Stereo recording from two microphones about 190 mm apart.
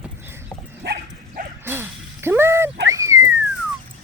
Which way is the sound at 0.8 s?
60° right (ahead or behind).